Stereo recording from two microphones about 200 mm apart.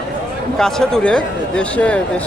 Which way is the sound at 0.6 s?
Centre (ahead or behind).